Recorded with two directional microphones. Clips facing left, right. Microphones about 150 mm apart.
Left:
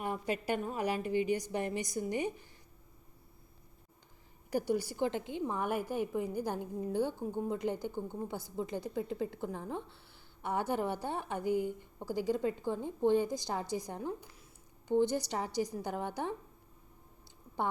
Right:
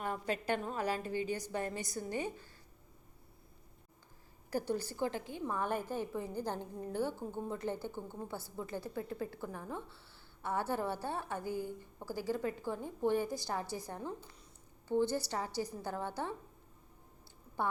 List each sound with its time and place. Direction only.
0.0 s a woman's voice: 10° left (ahead or behind)
4.5 s a woman's voice: 10° left (ahead or behind)
17.6 s a woman's voice: 20° left (ahead or behind)